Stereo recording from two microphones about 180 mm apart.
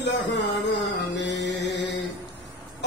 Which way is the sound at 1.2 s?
70° left (ahead or behind).